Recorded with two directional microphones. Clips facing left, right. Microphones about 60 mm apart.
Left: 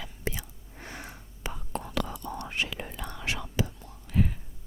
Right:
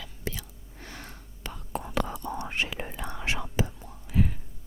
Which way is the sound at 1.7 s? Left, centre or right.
Centre.